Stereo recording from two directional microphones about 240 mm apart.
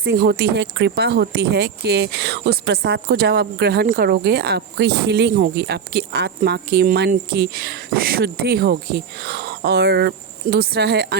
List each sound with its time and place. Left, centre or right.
0.0 s speech: right